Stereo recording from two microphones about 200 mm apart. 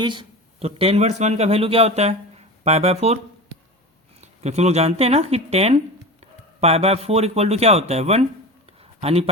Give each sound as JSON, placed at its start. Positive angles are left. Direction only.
{"t": 0.0, "sound": "speech", "side_deg": -25}
{"t": 4.2, "sound": "speech", "side_deg": -35}
{"t": 8.8, "sound": "a sound", "side_deg": -30}